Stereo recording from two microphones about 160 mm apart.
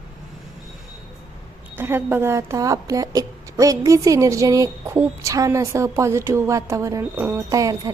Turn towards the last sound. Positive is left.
turn(degrees=-20)  # may be behind; listen again after turning